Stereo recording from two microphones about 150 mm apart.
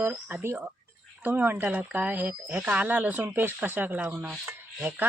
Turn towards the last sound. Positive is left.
turn(degrees=-15)  # may be behind; listen again after turning